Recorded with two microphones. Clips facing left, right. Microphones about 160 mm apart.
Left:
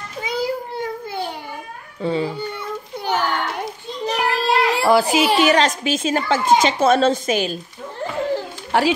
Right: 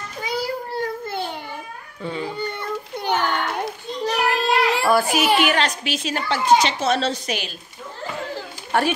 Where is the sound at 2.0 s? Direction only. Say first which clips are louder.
Left 7 dB; 30° left (ahead or behind).